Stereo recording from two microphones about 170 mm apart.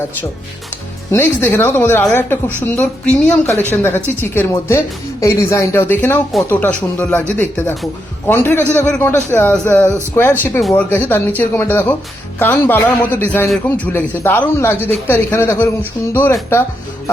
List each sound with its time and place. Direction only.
1.1 s a woman's voice: 15° left (ahead or behind)
10.6 s a woman's voice: centre (ahead or behind)